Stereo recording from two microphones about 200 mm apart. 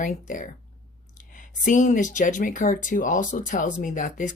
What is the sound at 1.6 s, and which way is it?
Speech, 40° left (ahead or behind).